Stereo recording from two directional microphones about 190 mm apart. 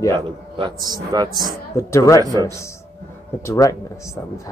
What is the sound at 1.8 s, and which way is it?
A man's voice, 15° left (ahead or behind).